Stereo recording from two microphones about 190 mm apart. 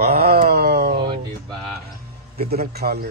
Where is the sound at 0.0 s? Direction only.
55° right (ahead or behind).